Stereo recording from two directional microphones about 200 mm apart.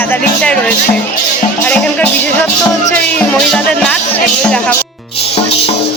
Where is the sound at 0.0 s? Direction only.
5° left (ahead or behind).